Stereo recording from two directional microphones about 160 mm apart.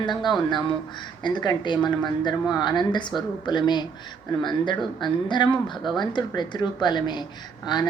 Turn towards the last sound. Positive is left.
turn(degrees=25)  # may be behind; listen again after turning